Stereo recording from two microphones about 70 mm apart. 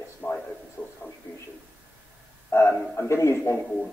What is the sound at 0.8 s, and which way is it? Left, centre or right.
Speech, centre.